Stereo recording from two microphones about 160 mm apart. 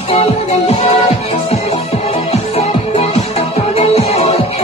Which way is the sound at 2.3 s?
40° left (ahead or behind).